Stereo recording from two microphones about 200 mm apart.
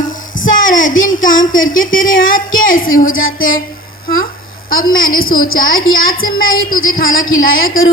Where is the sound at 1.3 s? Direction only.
75° left (ahead or behind).